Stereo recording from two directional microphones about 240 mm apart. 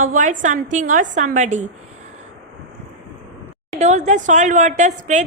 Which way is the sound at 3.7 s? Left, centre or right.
Right.